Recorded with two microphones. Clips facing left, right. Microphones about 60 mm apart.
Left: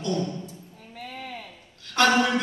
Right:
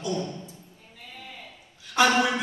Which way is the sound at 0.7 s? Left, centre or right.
Left.